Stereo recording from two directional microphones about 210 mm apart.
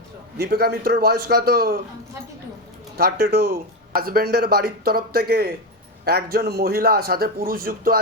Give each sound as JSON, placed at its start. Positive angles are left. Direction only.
{"t": 0.3, "sound": "speech", "side_deg": -50}
{"t": 3.0, "sound": "speech", "side_deg": -50}